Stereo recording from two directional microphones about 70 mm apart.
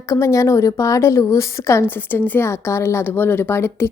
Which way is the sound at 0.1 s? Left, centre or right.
Left.